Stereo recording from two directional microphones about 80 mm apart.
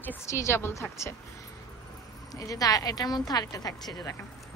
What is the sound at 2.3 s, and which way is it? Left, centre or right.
A woman's voice, left.